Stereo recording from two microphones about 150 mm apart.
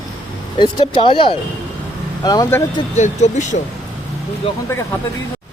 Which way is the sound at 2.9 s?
50° left (ahead or behind).